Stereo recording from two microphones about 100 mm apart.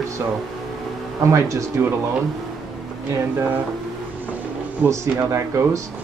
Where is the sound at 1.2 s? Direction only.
30° right (ahead or behind).